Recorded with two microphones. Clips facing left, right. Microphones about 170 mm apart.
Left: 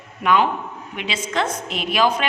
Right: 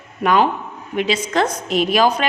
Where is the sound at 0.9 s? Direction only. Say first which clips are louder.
Right 6 dB; 40° right (ahead or behind).